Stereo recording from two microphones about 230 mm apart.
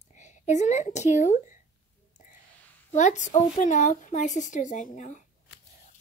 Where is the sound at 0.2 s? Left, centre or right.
Left.